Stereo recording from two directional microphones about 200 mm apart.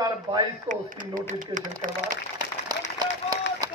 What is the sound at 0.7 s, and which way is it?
Speech, 40° right (ahead or behind).